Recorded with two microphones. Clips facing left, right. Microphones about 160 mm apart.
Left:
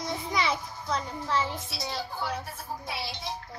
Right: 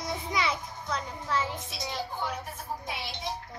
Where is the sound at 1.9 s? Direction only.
35° left (ahead or behind).